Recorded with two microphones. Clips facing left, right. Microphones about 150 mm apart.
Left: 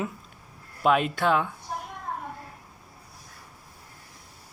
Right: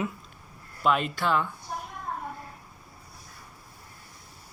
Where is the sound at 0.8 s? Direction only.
50° left (ahead or behind).